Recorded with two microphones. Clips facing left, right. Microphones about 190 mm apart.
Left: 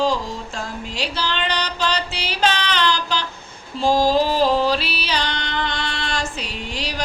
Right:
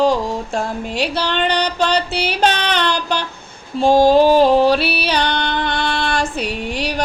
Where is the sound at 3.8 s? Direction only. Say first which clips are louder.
Right 6 dB; 60° right (ahead or behind).